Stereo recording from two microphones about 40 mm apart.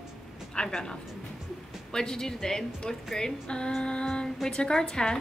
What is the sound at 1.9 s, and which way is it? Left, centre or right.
Speech, centre.